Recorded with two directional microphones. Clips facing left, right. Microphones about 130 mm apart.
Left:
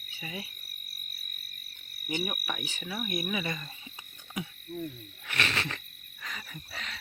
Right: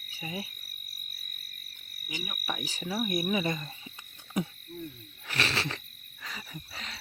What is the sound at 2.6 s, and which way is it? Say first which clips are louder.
Owl: right 3 dB; 35° right (ahead or behind).